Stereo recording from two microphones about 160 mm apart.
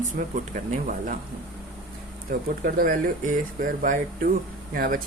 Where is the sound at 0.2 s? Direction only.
55° right (ahead or behind).